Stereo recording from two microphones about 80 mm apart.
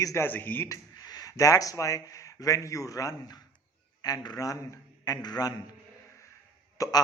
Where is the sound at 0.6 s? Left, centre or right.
Left.